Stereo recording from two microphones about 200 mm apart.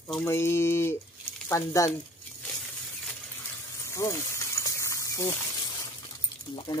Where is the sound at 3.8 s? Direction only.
15° left (ahead or behind).